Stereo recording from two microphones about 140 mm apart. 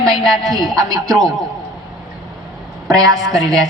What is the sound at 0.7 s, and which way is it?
Speech, 25° right (ahead or behind).